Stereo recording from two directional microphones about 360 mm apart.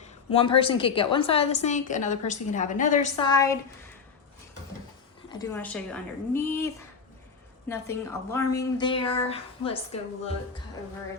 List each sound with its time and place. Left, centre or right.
0.0 s a woman's voice: centre
5.3 s a woman's voice: centre
7.7 s a woman's voice: centre